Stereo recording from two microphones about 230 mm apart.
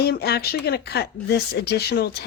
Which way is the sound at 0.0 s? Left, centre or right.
Left.